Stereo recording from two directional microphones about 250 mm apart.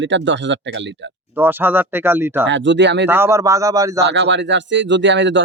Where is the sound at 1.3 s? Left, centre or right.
Centre.